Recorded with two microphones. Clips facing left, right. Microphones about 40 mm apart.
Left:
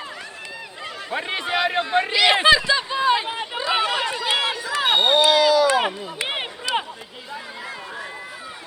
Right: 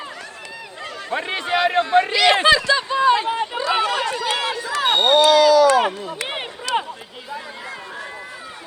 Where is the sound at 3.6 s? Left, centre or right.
Centre.